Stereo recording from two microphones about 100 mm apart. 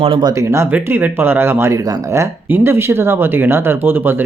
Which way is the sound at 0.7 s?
20° right (ahead or behind).